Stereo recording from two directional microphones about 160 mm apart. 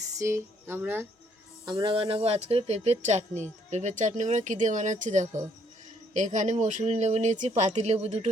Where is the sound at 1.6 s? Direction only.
30° right (ahead or behind).